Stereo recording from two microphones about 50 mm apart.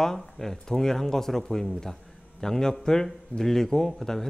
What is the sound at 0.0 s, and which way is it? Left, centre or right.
Speech, centre.